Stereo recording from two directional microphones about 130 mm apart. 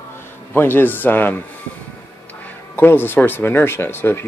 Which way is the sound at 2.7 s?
15° left (ahead or behind).